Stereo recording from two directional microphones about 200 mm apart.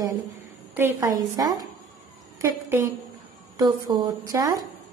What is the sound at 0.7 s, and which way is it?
A woman's voice, 15° right (ahead or behind).